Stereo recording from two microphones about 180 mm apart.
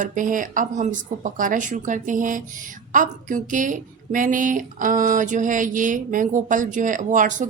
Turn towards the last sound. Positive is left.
turn(degrees=-45)  # may be behind; listen again after turning